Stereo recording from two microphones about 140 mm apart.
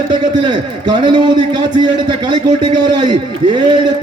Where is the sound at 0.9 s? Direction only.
35° right (ahead or behind).